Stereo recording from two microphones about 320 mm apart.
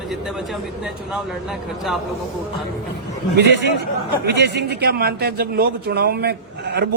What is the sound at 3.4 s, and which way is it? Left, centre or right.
A man's voice, right.